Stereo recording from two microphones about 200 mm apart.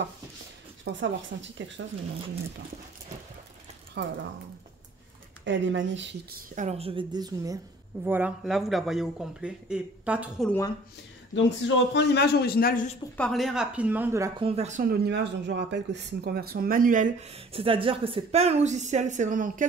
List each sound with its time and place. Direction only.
0.9 s speech: 65° right (ahead or behind)
4.0 s speech: 60° right (ahead or behind)
5.4 s speech: 65° right (ahead or behind)
6.5 s a woman's voice: 35° right (ahead or behind); by 10.5 s 5° right (ahead or behind)
11.3 s a man's voice: 65° left (ahead or behind); by 12.9 s 45° left (ahead or behind)
13.2 s a woman's voice: centre (ahead or behind)
14.4 s speech: 30° right (ahead or behind)